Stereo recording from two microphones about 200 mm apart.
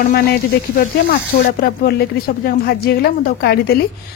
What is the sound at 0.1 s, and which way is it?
Speech, 45° left (ahead or behind).